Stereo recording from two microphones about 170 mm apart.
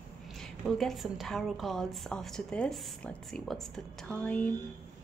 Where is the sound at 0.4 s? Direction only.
Centre (ahead or behind).